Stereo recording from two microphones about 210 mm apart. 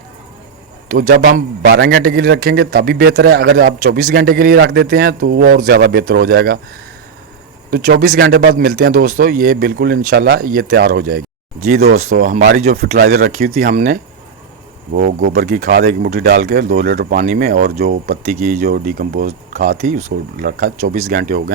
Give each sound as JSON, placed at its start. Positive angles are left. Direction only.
{"t": 0.9, "sound": "a man's voice", "side_deg": -40}
{"t": 7.7, "sound": "a man's voice", "side_deg": -45}